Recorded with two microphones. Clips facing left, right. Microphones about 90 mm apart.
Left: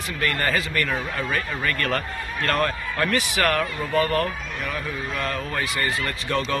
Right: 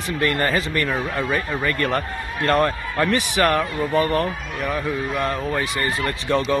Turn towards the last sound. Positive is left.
turn(degrees=-20)  # may be behind; listen again after turning